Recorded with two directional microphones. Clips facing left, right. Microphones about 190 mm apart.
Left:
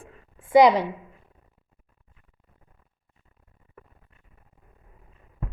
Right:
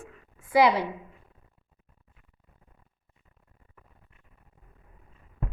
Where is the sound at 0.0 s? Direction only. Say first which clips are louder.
Right 1 dB; 30° left (ahead or behind).